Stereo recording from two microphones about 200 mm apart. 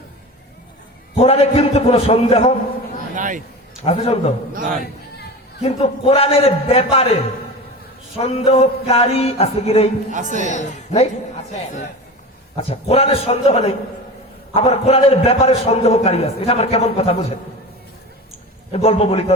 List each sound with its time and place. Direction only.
1.1 s a man's voice: 30° left (ahead or behind)
3.2 s speech: 40° right (ahead or behind)
3.8 s speech: 30° left (ahead or behind)
5.6 s a man's voice: 30° left (ahead or behind)
8.2 s a man's voice: 30° left (ahead or behind)
18.7 s speech: 30° left (ahead or behind)